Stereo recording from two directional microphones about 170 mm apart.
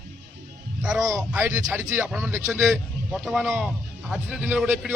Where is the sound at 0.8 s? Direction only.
5° right (ahead or behind).